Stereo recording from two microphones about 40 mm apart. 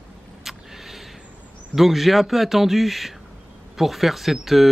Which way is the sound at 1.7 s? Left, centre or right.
Centre.